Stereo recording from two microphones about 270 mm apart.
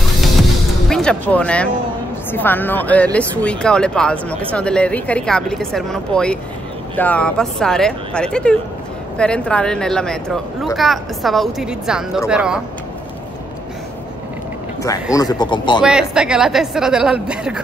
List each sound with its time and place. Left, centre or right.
0.2 s music: centre
2.3 s speech: centre
15.1 s speech: centre
15.8 s speech: centre